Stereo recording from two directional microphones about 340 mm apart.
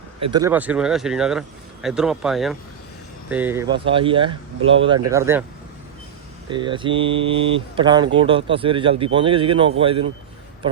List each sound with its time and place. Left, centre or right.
0.2 s speech: centre
6.5 s speech: centre